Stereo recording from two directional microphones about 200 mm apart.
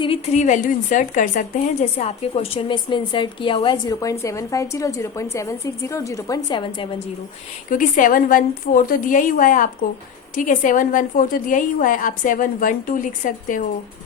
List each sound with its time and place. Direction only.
0.0 s a woman's voice: 30° left (ahead or behind)
7.7 s a woman's voice: 40° left (ahead or behind)